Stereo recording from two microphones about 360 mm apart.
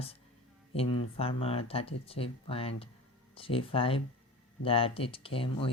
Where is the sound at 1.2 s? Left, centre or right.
Centre.